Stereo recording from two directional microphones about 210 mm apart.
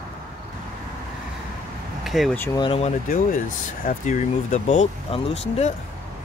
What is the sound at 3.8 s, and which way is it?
Speech, 35° left (ahead or behind).